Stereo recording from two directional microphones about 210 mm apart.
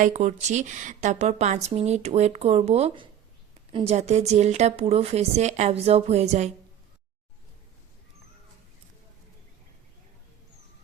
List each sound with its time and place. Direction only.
0.0 s speech: 35° right (ahead or behind)